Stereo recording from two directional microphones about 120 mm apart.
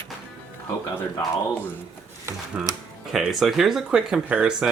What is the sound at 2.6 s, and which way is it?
Speech, 10° right (ahead or behind).